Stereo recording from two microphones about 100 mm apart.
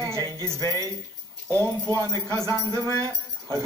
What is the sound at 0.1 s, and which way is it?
Speech, 30° left (ahead or behind).